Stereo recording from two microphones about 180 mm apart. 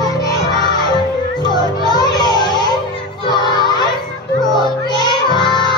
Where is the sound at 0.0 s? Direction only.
20° left (ahead or behind).